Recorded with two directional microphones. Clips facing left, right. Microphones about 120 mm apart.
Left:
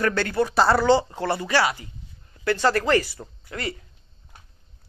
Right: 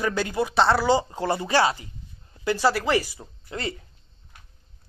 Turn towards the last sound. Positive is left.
turn(degrees=-25)  # may be behind; listen again after turning